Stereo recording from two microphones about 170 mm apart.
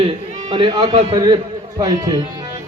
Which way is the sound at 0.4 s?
30° right (ahead or behind).